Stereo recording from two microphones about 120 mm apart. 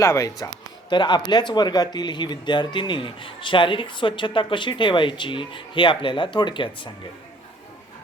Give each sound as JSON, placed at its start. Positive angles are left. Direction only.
{"t": 0.0, "sound": "speech", "side_deg": 25}